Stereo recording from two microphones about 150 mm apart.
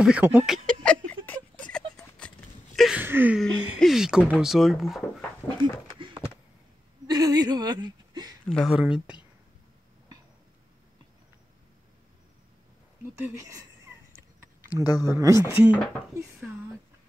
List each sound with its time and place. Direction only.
0.0 s speech: 10° right (ahead or behind)
0.5 s a sound: 10° left (ahead or behind)
3.0 s speech: 15° right (ahead or behind)
3.3 s speech: centre (ahead or behind)
5.9 s a sound: 35° right (ahead or behind)
8.5 s speech: 5° left (ahead or behind)
8.7 s speech: 10° right (ahead or behind)
13.2 s a sound: 20° right (ahead or behind)
14.8 s speech: 25° left (ahead or behind)
15.1 s speech: 20° right (ahead or behind)